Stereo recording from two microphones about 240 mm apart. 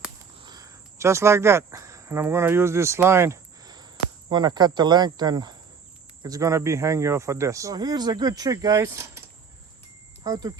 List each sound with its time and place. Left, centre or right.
0.3 s speech: centre
10.2 s speech: centre